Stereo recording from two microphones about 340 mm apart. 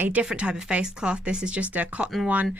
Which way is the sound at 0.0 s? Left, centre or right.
Centre.